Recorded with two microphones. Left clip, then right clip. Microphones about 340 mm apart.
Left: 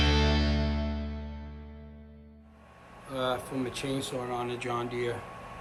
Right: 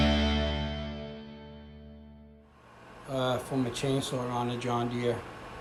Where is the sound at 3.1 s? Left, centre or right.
Centre.